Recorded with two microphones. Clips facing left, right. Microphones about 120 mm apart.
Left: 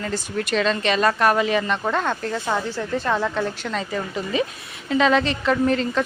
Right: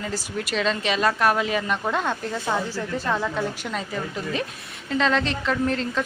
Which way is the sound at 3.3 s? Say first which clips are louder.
Left 2 dB; 5° right (ahead or behind).